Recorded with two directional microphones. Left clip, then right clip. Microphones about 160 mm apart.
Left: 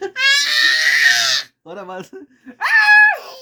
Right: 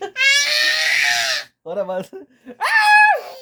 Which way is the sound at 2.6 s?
30° right (ahead or behind).